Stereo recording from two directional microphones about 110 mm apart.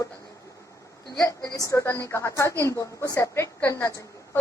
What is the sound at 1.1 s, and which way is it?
A woman's voice, 30° left (ahead or behind).